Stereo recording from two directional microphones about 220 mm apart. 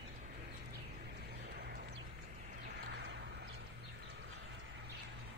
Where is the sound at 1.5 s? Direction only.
45° right (ahead or behind).